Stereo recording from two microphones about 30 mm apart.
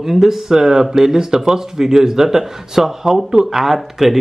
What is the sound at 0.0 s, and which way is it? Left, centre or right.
Speech, centre.